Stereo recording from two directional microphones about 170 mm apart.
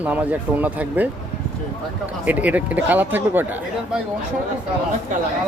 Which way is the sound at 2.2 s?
10° right (ahead or behind).